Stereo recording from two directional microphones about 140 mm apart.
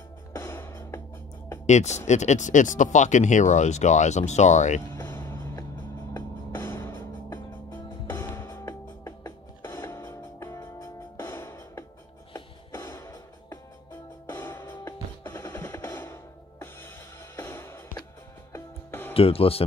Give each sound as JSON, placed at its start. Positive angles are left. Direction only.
{"t": 0.3, "sound": "music", "side_deg": 15}
{"t": 1.7, "sound": "speech", "side_deg": 55}
{"t": 4.9, "sound": "music", "side_deg": 15}
{"t": 19.1, "sound": "speech", "side_deg": 45}